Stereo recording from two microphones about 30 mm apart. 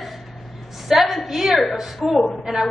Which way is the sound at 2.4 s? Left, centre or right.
Centre.